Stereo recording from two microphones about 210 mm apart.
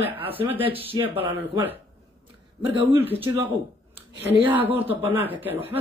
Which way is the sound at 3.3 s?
15° right (ahead or behind).